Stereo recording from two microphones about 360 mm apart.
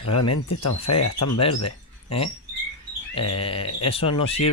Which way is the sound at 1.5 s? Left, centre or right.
Left.